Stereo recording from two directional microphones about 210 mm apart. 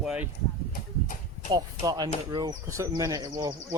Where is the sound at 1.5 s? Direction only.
15° right (ahead or behind).